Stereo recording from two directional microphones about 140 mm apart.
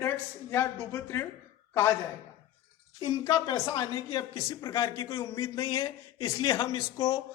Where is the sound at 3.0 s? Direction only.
30° left (ahead or behind).